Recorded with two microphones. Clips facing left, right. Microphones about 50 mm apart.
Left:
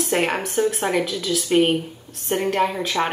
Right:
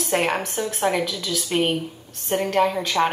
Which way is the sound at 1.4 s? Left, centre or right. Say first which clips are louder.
Left 5 dB; centre.